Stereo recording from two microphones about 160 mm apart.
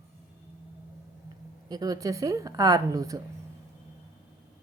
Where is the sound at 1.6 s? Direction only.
25° right (ahead or behind).